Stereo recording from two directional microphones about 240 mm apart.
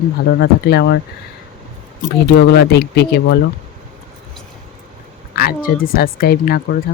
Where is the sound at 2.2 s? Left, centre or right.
Left.